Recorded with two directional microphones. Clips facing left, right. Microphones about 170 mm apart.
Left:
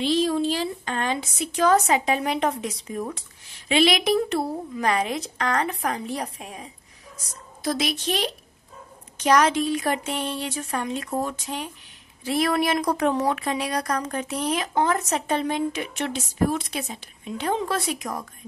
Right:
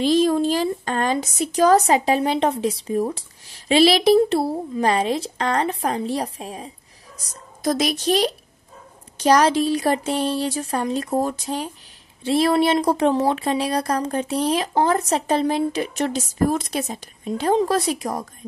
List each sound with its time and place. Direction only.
0.0 s a woman's voice: 45° right (ahead or behind)
7.6 s a woman's voice: 40° right (ahead or behind)